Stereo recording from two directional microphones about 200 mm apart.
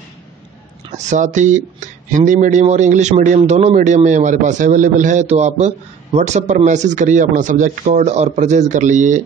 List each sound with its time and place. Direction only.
0.9 s speech: 35° right (ahead or behind)